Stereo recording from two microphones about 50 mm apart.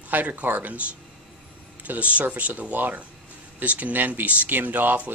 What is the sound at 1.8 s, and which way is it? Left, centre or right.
Speech, right.